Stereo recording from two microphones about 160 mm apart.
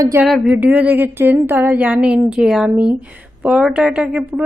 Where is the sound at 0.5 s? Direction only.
10° right (ahead or behind).